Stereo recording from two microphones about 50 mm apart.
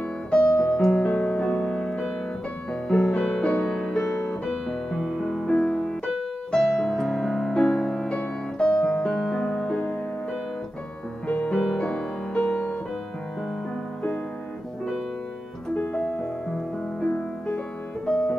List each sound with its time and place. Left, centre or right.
0.3 s music: left
0.7 s music: centre
1.0 s music: left
1.9 s music: centre
4.6 s music: centre
5.5 s music: centre
7.9 s music: left
11.2 s music: left
11.5 s music: centre